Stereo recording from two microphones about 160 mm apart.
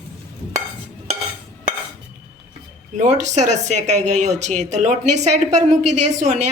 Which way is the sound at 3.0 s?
45° right (ahead or behind).